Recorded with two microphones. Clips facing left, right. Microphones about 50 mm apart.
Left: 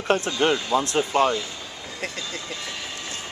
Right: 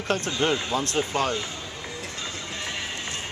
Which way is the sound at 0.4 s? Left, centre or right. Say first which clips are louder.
Left 4 dB; left.